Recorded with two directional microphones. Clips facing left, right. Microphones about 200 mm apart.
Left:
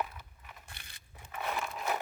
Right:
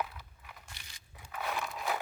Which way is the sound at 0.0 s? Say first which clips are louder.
Even; centre (ahead or behind).